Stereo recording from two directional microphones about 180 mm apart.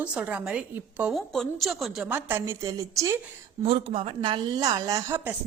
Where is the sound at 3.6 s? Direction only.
30° right (ahead or behind); by 5.3 s 15° right (ahead or behind).